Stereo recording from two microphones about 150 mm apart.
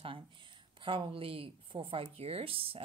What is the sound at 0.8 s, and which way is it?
Speech, 35° right (ahead or behind).